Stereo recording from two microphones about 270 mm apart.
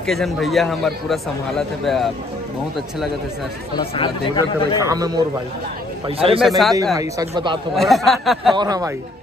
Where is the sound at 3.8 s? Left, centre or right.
Centre.